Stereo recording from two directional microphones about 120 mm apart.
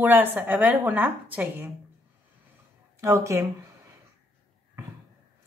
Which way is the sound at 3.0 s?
25° right (ahead or behind).